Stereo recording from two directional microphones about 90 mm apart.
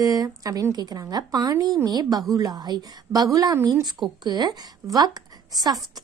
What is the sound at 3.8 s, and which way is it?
A woman's voice, 50° right (ahead or behind).